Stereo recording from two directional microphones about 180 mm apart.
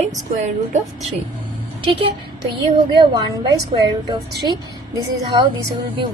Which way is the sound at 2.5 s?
25° right (ahead or behind).